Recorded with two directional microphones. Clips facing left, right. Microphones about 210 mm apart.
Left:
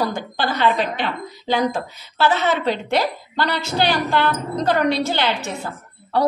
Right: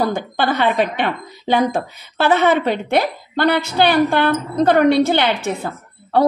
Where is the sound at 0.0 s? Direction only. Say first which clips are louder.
Right 4 dB; 55° right (ahead or behind).